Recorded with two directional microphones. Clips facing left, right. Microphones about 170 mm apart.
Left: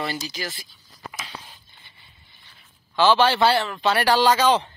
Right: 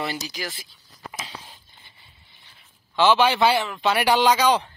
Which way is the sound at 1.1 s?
25° right (ahead or behind).